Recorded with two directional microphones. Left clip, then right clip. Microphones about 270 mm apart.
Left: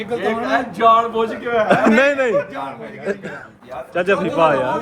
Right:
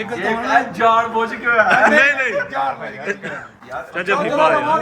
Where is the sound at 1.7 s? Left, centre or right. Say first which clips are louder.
Even; centre.